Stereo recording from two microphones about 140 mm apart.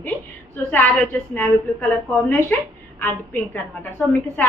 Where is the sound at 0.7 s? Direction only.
10° left (ahead or behind).